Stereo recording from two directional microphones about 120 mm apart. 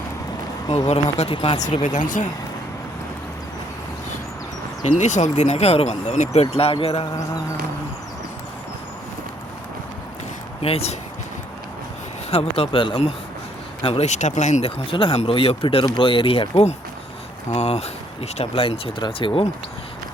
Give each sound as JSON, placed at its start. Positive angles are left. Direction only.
{"t": 1.2, "sound": "speech", "side_deg": 55}
{"t": 1.8, "sound": "speech", "side_deg": 90}
{"t": 4.8, "sound": "speech", "side_deg": 85}
{"t": 10.6, "sound": "speech", "side_deg": 55}
{"t": 12.3, "sound": "speech", "side_deg": 55}
{"t": 13.8, "sound": "speech", "side_deg": 60}
{"t": 14.9, "sound": "speech", "side_deg": 55}